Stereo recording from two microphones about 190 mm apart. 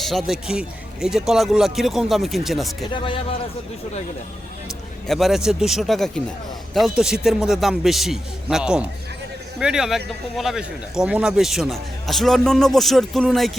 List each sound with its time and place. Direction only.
0.0 s speech: centre (ahead or behind)
2.9 s speech: 25° left (ahead or behind)
5.0 s speech: centre (ahead or behind)